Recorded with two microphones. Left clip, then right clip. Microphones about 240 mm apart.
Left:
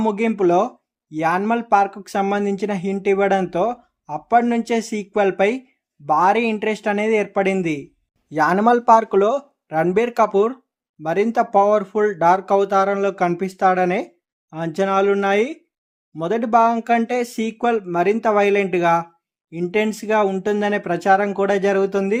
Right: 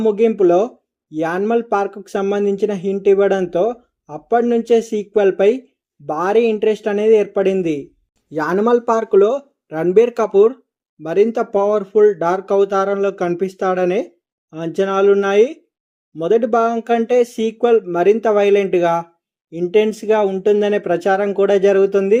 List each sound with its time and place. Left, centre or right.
0.0 s speech: centre